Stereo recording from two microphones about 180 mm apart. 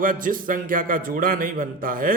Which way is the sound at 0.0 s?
50° right (ahead or behind).